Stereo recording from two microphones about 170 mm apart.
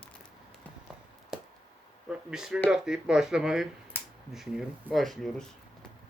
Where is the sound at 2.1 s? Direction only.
5° right (ahead or behind).